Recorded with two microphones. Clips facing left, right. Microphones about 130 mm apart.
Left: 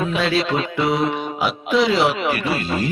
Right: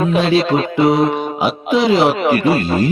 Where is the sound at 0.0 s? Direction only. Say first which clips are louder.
Right 6 dB; 40° right (ahead or behind).